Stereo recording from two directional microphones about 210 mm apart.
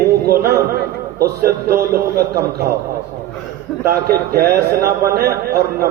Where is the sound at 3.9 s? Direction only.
45° right (ahead or behind).